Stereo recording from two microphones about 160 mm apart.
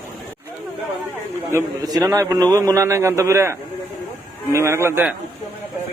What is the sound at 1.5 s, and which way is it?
A man's voice, 20° right (ahead or behind).